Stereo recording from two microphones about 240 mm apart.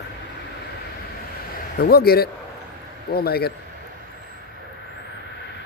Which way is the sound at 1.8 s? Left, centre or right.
Left.